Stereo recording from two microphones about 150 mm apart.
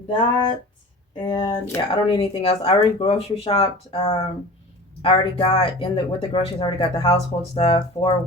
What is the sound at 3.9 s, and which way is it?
Speech, 30° left (ahead or behind).